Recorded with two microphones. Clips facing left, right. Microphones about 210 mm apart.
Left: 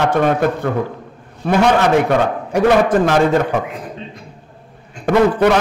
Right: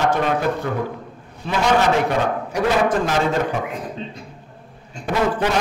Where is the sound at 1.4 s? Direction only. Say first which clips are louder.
Left 5 dB; 55° left (ahead or behind).